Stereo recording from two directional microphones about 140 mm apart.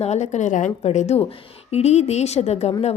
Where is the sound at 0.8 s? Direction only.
50° left (ahead or behind).